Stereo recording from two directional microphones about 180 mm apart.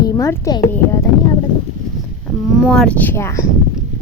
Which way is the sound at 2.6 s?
5° left (ahead or behind).